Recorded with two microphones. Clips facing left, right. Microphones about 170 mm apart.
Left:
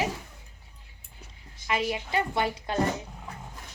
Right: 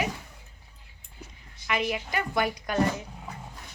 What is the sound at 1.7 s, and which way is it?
Speech, 30° left (ahead or behind).